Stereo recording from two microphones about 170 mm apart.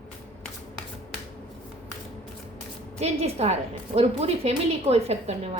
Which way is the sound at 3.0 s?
40° right (ahead or behind).